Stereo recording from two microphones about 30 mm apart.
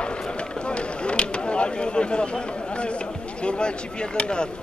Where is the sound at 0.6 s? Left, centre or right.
Left.